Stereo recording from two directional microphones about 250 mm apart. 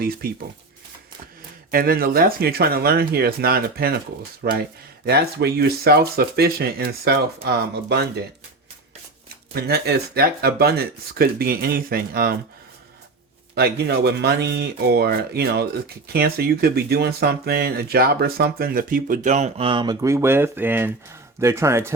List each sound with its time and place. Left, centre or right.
0.0 s speech: right
1.7 s speech: right
9.6 s speech: right
13.6 s speech: right; by 21.9 s centre